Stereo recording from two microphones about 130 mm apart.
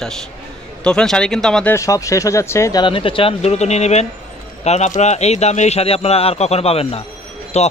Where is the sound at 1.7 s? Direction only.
25° left (ahead or behind).